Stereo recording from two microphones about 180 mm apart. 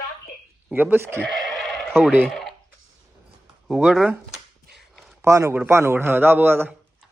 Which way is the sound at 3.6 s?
Centre (ahead or behind).